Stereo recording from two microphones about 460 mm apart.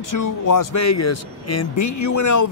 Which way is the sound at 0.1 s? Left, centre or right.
Left.